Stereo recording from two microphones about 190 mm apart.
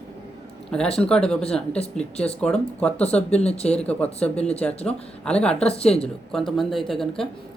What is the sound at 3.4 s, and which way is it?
Speech, 35° left (ahead or behind).